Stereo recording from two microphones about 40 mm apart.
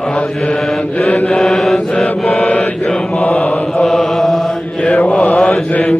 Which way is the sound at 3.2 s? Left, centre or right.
Left.